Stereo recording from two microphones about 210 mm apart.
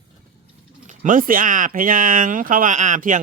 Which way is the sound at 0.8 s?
35° right (ahead or behind).